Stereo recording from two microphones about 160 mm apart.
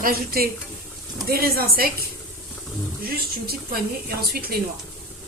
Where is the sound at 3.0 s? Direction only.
70° right (ahead or behind).